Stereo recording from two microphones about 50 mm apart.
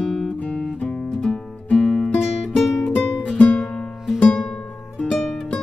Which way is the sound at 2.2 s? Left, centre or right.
Centre.